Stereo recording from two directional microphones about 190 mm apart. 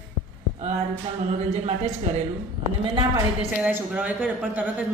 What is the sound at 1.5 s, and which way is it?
Speech, 35° right (ahead or behind).